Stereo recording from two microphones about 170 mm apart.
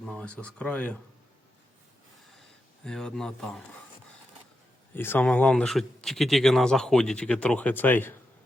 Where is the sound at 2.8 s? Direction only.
5° left (ahead or behind).